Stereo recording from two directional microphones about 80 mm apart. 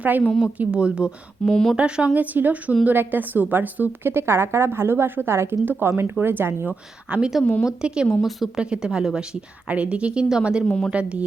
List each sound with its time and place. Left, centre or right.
0.0 s a woman's voice: centre
1.5 s a woman's voice: centre
1.7 s a woman's voice: centre
7.1 s a woman's voice: centre
10.7 s a woman's voice: centre
10.9 s a woman's voice: centre